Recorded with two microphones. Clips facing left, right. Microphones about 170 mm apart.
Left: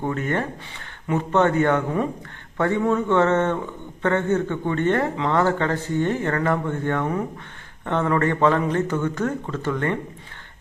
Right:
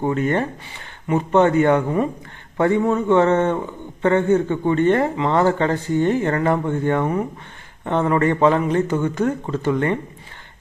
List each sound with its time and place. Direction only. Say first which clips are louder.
0.0 s a man's voice: right 4 dB; 20° right (ahead or behind)